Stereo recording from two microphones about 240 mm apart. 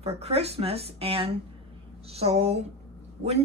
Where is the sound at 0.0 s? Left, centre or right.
Right.